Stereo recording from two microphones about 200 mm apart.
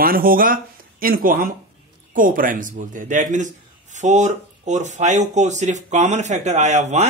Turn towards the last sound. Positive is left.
turn(degrees=-35)  # may be behind; listen again after turning